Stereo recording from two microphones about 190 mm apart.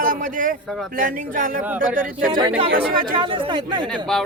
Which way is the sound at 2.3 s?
25° right (ahead or behind).